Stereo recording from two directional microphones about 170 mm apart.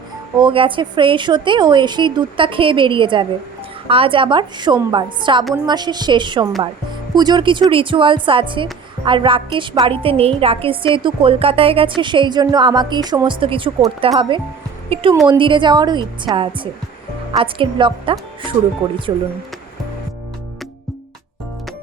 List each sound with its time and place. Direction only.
0.3 s a woman's voice: 30° right (ahead or behind)